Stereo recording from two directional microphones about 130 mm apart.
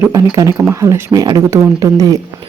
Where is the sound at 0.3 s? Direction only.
25° right (ahead or behind).